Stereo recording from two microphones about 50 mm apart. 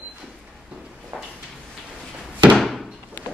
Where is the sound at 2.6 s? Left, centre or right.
Centre.